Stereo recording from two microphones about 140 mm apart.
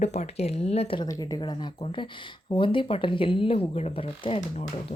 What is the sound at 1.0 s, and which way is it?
Speech, 25° left (ahead or behind).